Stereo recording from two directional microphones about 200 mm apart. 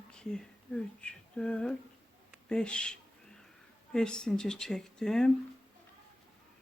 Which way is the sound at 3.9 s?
5° left (ahead or behind).